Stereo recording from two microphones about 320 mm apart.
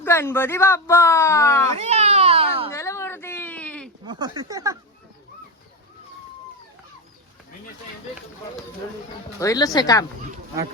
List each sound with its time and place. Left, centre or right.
0.0 s speech: centre
1.7 s baby cry: right
2.7 s a sound: centre
4.0 s speech: centre
9.4 s speech: centre